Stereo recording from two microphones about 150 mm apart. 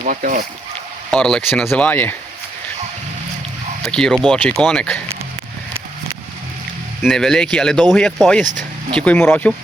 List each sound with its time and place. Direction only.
0.0 s speech: 60° right (ahead or behind)
1.1 s speech: 5° left (ahead or behind)
3.8 s speech: 5° left (ahead or behind)
7.0 s speech: centre (ahead or behind)